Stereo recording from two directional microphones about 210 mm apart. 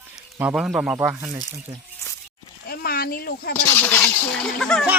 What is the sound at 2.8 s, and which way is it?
Speech, 45° left (ahead or behind).